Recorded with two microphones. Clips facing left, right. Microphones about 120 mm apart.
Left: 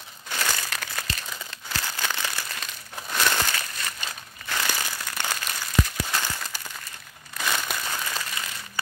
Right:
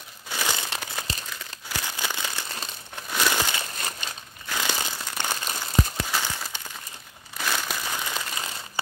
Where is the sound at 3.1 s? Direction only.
5° right (ahead or behind).